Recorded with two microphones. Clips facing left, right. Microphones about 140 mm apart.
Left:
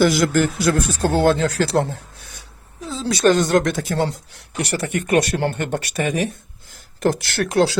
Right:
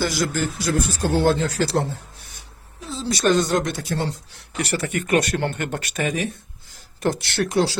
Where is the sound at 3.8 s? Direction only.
50° left (ahead or behind).